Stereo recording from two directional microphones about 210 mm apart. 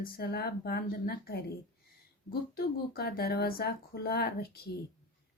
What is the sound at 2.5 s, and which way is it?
Speech, 45° left (ahead or behind).